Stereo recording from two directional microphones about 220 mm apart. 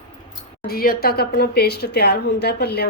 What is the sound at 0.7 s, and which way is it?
Speech, 45° left (ahead or behind).